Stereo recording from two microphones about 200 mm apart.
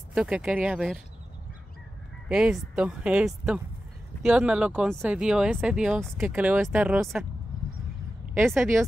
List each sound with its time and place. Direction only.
0.1 s speech: 5° right (ahead or behind)
2.2 s speech: 5° right (ahead or behind)
8.4 s speech: 10° right (ahead or behind)